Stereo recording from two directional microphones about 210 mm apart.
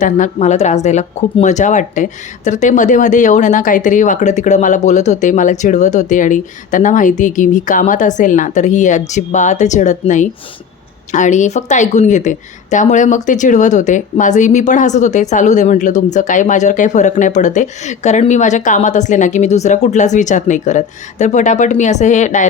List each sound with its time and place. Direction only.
0.0 s speech: 35° left (ahead or behind)